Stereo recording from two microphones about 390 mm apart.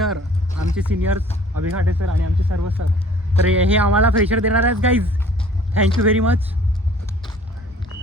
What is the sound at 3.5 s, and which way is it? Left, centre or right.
Speech, centre.